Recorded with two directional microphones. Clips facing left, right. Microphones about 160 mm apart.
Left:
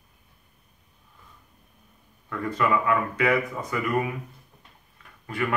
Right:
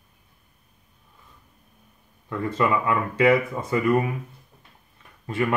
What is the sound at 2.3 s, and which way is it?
Speech, 25° right (ahead or behind).